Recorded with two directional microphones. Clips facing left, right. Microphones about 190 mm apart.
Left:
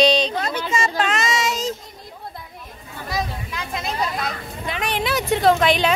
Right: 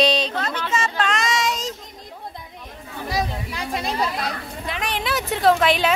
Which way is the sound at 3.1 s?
35° right (ahead or behind).